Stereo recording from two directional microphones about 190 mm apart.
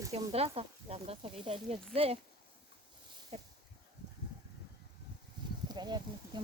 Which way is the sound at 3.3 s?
30° right (ahead or behind).